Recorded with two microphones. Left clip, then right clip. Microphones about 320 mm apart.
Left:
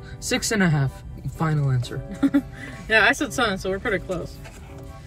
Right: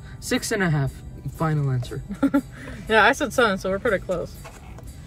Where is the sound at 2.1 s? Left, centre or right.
Centre.